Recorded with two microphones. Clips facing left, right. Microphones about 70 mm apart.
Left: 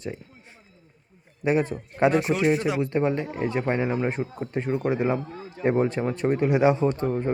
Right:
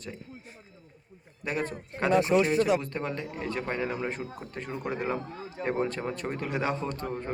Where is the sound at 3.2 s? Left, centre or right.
Left.